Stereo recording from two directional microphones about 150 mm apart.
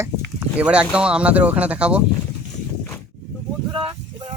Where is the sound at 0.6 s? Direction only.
5° right (ahead or behind).